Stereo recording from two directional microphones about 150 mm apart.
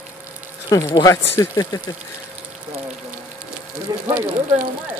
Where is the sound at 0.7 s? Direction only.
20° left (ahead or behind).